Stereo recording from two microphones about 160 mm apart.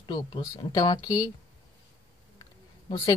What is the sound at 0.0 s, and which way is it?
Speech, 30° left (ahead or behind).